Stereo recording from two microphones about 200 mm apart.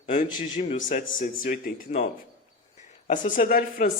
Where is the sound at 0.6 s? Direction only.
35° left (ahead or behind).